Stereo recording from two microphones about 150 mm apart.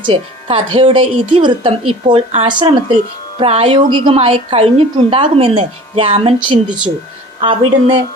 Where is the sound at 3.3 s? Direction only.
40° right (ahead or behind).